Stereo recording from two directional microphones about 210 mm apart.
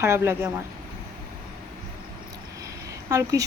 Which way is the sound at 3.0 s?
15° right (ahead or behind).